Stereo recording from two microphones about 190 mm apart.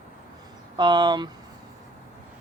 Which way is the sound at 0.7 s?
25° right (ahead or behind).